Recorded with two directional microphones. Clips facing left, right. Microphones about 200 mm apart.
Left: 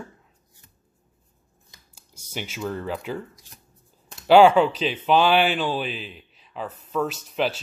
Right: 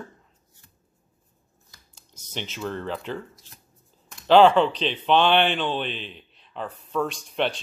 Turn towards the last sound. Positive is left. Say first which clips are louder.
# left 1 dB
turn(degrees=5)  # may be behind; listen again after turning